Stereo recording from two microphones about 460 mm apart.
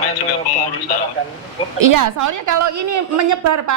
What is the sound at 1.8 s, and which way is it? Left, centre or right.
A woman's voice, right.